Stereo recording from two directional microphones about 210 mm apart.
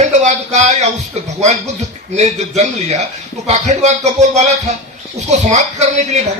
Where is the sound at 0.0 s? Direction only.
35° right (ahead or behind).